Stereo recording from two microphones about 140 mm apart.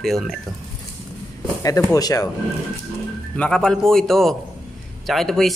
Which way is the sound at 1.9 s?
25° left (ahead or behind).